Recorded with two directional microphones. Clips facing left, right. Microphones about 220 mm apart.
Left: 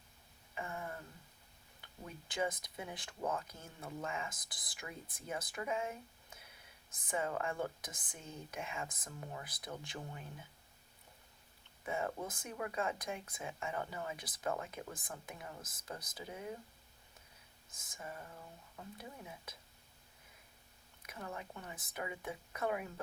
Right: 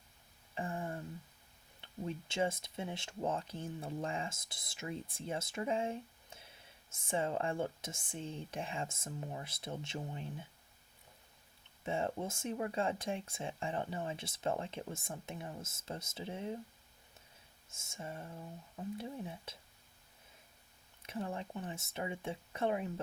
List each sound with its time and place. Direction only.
0.5 s a sound: 30° right (ahead or behind)
1.8 s speech: 25° right (ahead or behind)
11.8 s speech: 25° right (ahead or behind)
17.7 s speech: 25° right (ahead or behind)
21.0 s speech: 30° right (ahead or behind)